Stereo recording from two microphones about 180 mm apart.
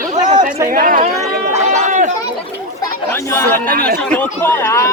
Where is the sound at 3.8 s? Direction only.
55° right (ahead or behind).